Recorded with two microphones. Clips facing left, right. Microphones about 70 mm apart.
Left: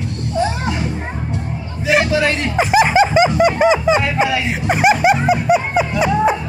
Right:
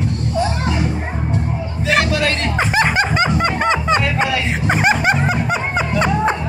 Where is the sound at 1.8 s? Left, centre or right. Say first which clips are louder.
Left 2 dB; centre.